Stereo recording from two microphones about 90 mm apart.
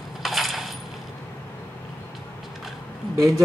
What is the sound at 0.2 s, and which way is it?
Coin, centre (ahead or behind).